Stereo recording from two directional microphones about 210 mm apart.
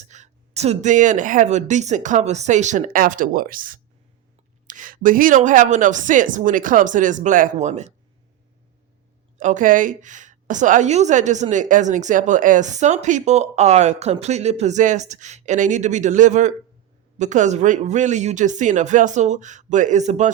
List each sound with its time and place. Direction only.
0.0 s a woman's voice: 35° right (ahead or behind)
9.4 s a woman's voice: 35° right (ahead or behind)